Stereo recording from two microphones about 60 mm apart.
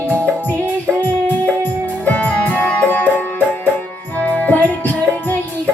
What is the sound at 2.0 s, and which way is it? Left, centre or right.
Music, left.